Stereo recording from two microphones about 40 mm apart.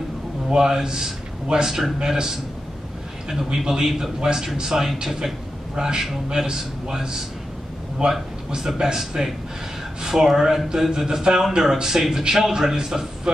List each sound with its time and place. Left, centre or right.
0.5 s speech: centre
3.5 s speech: centre